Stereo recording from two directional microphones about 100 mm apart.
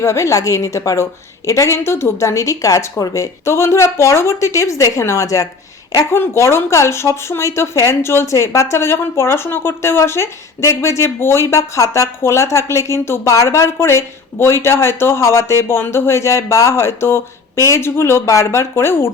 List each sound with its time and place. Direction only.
0.0 s speech: 30° left (ahead or behind)